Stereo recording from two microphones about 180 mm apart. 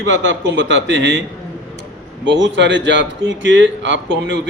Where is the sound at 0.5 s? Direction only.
90° right.